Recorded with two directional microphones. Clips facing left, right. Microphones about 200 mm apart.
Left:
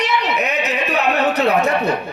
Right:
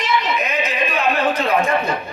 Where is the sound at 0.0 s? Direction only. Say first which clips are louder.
Left 1 dB; 65° left (ahead or behind).